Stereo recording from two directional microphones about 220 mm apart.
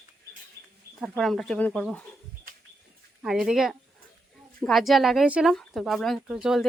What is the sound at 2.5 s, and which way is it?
Bird, 40° right (ahead or behind).